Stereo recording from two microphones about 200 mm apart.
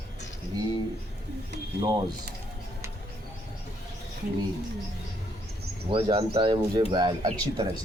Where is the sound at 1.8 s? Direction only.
20° right (ahead or behind).